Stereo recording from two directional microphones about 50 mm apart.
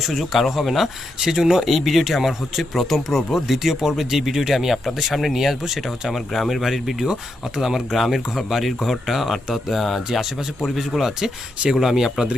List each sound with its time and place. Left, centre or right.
0.0 s speech: centre